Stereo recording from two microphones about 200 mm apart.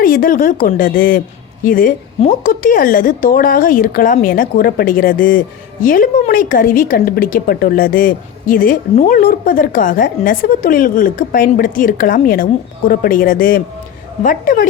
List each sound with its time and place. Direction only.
0.0 s a woman's voice: 45° left (ahead or behind)